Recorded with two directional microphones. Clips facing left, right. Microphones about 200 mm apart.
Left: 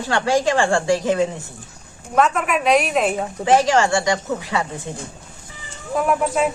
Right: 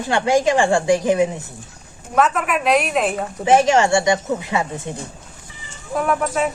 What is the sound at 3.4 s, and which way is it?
Speech, 20° right (ahead or behind).